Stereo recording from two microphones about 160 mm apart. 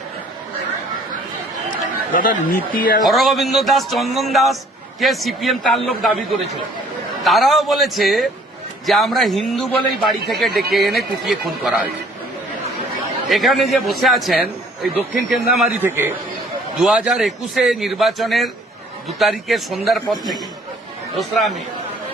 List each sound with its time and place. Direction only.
2.1 s speech: 60° left (ahead or behind)
3.0 s a man's voice: centre (ahead or behind)
13.3 s a man's voice: centre (ahead or behind)
15.5 s a man's voice: 10° right (ahead or behind)
21.2 s a man's voice: centre (ahead or behind)